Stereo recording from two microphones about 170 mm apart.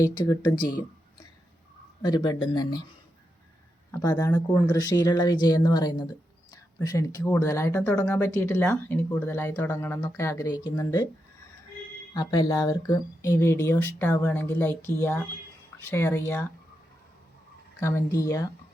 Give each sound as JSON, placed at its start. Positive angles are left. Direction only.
{"t": 0.0, "sound": "speech", "side_deg": 20}
{"t": 2.0, "sound": "speech", "side_deg": 20}
{"t": 4.0, "sound": "speech", "side_deg": 20}
{"t": 12.1, "sound": "speech", "side_deg": 20}
{"t": 17.7, "sound": "speech", "side_deg": 15}